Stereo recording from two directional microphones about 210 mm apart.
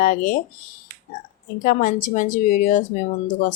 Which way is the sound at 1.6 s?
40° left (ahead or behind).